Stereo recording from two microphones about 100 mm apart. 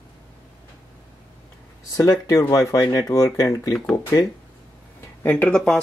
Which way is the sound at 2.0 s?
35° left (ahead or behind).